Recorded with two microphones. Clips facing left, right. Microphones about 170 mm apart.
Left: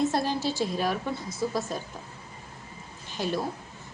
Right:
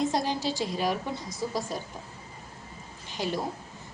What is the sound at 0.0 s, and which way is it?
A woman's voice, 15° right (ahead or behind).